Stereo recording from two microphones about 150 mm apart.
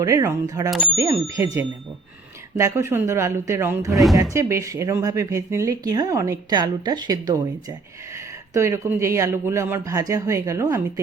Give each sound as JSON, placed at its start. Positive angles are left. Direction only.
{"t": 0.0, "sound": "speech", "side_deg": -20}